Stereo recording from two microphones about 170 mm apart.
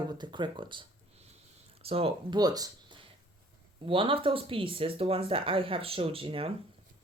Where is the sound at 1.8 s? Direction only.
35° right (ahead or behind).